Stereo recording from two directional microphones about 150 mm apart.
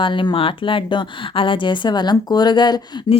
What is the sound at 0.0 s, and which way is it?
Speech, 35° left (ahead or behind).